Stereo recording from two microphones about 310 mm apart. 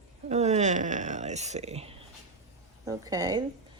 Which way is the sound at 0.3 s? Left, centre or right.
Right.